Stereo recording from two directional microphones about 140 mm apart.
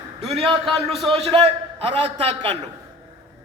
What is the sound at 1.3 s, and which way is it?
A man's voice, 45° right (ahead or behind).